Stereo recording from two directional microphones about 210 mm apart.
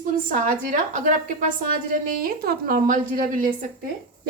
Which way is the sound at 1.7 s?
40° right (ahead or behind).